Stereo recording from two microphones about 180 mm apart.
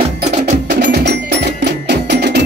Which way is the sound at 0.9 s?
70° right (ahead or behind).